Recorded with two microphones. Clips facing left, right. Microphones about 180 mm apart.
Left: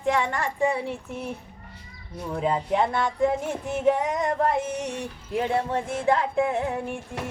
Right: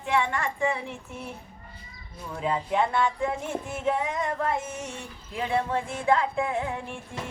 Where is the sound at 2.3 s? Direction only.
30° left (ahead or behind).